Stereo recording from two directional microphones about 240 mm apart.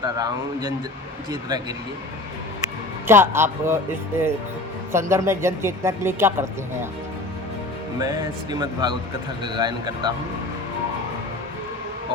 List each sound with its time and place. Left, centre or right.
0.0 s speech: centre
3.1 s speech: centre
4.9 s speech: centre
7.9 s speech: centre